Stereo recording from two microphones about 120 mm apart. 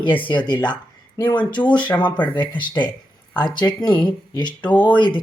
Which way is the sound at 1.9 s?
40° left (ahead or behind).